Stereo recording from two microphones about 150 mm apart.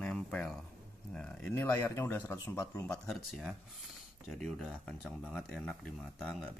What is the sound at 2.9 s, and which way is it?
Speech, 5° left (ahead or behind).